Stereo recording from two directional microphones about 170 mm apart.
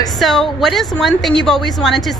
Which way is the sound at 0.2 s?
Centre (ahead or behind).